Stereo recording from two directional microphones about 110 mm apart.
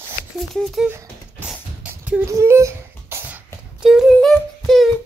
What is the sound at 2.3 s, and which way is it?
Wail, 25° right (ahead or behind).